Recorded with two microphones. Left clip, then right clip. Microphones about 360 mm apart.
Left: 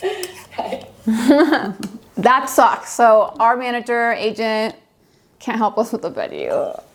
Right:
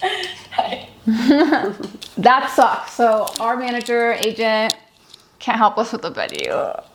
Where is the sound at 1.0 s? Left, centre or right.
Left.